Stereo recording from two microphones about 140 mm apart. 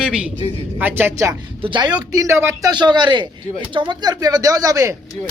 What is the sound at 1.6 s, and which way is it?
Speech, 35° right (ahead or behind).